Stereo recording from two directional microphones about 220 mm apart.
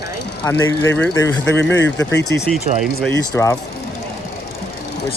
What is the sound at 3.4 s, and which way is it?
Speech, 10° left (ahead or behind).